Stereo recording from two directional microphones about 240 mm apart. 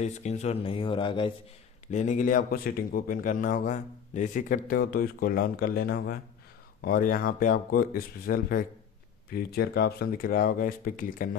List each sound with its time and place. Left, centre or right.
0.0 s speech: left
1.9 s speech: left